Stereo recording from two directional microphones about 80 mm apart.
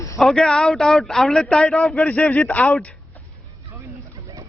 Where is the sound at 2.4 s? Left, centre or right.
Centre.